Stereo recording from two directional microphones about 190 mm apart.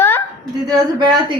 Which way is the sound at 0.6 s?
20° right (ahead or behind).